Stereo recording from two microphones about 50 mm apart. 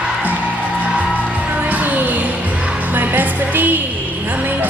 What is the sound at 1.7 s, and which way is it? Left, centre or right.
Music, right.